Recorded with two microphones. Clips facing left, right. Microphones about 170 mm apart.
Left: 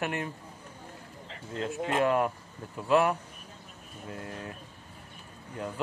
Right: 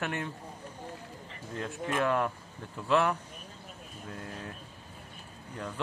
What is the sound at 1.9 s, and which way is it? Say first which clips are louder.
Speech: left 3 dB; 15° left (ahead or behind).